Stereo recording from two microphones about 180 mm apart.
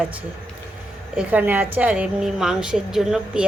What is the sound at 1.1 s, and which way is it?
A woman's voice, 10° right (ahead or behind).